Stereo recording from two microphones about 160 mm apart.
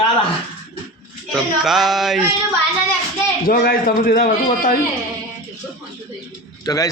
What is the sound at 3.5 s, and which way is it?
A man's voice, 65° left (ahead or behind).